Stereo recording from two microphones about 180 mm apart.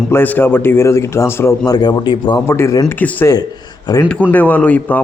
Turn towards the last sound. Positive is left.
turn(degrees=10)  # may be behind; listen again after turning